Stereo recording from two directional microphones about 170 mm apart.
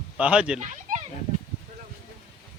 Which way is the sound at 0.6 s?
45° right (ahead or behind).